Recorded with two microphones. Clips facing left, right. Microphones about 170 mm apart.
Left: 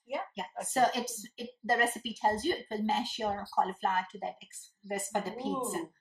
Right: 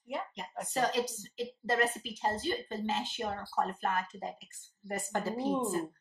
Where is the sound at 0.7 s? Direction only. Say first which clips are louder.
Left 2 dB; 45° left (ahead or behind).